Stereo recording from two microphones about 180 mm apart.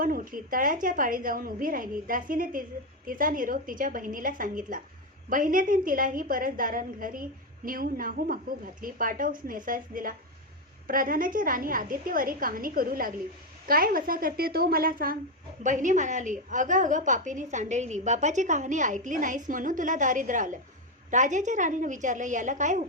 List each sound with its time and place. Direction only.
0.0 s a woman's voice: 50° right (ahead or behind)